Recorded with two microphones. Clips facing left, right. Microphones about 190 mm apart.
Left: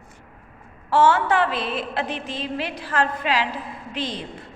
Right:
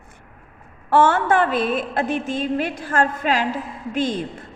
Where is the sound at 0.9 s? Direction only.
50° right (ahead or behind).